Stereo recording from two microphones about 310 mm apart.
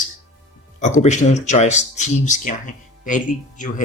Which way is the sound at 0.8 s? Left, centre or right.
Left.